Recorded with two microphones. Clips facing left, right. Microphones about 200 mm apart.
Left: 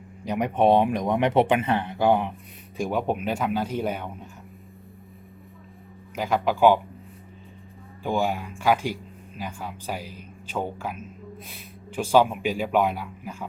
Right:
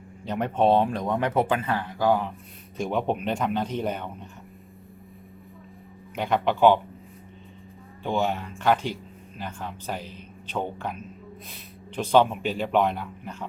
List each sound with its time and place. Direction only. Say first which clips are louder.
0.3 s speech: left 2 dB; 15° left (ahead or behind)
2.7 s speech: even; 5° left (ahead or behind)
6.1 s a man's voice: even; centre (ahead or behind)
8.0 s speech: left 1 dB; 10° left (ahead or behind)